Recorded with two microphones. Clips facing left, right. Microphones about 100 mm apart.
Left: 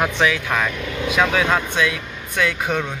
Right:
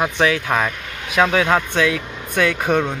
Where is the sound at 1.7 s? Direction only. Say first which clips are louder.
Right 3 dB; 40° right (ahead or behind).